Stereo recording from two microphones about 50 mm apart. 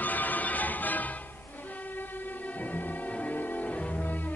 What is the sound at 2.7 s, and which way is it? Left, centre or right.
Music, left.